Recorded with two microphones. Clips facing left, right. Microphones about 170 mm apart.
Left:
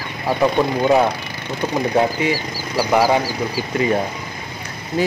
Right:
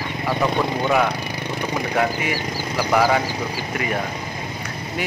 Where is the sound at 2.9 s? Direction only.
20° left (ahead or behind).